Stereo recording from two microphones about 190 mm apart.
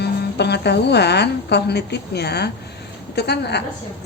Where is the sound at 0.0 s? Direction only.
60° left (ahead or behind).